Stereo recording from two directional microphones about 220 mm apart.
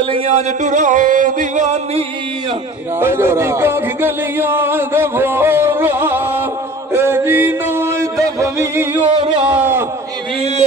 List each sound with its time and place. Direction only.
0.1 s a sound: 30° right (ahead or behind)
3.0 s speech: 10° right (ahead or behind)
6.9 s music: 10° right (ahead or behind)
9.4 s speech: 10° right (ahead or behind)